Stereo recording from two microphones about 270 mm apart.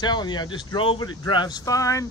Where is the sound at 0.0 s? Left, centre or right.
Centre.